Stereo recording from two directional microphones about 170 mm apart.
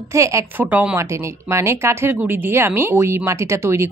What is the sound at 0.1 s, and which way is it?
Speech, 20° right (ahead or behind).